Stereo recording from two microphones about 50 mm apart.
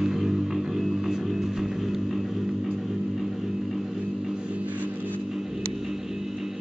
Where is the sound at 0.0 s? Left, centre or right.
Centre.